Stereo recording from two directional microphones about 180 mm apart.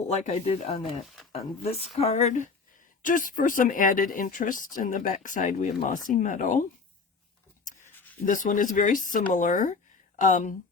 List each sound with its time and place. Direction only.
0.1 s speech: 35° left (ahead or behind)
8.2 s speech: 45° left (ahead or behind)